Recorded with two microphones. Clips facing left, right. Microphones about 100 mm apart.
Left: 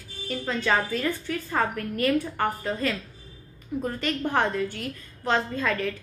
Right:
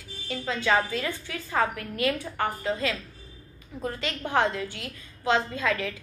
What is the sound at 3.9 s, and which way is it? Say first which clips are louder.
Speech: even; 45° left (ahead or behind).